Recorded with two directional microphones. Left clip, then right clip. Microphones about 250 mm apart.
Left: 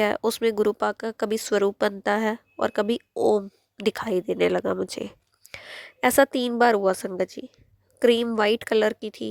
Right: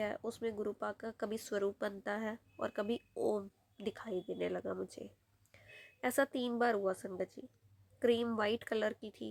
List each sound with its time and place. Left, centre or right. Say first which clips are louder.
0.0 s speech: left 16 dB; left